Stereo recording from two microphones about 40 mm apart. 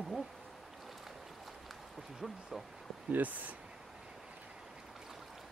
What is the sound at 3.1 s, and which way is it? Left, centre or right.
Speech, right.